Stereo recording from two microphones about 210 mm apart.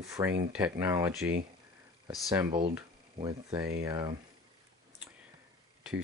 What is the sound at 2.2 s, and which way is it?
Speech, 15° right (ahead or behind).